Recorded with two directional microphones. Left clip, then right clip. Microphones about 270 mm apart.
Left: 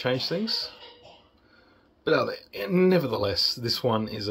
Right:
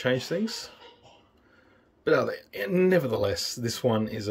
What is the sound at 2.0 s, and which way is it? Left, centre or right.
Speech, centre.